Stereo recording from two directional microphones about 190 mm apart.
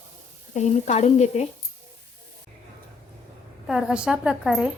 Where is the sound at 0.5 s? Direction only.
35° left (ahead or behind).